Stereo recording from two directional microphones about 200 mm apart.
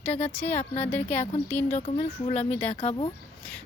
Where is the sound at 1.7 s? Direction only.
35° left (ahead or behind).